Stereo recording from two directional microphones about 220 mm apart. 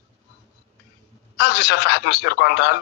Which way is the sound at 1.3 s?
50° left (ahead or behind).